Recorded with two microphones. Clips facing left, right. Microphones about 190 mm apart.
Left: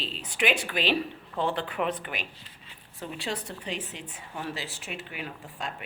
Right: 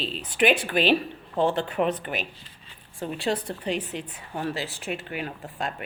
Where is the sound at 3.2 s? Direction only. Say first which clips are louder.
Right 7 dB; 55° right (ahead or behind).